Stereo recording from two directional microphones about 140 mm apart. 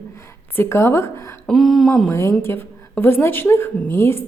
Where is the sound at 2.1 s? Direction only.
20° left (ahead or behind).